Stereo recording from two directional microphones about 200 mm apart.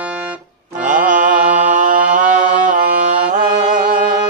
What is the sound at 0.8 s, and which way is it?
Mantra, 40° right (ahead or behind).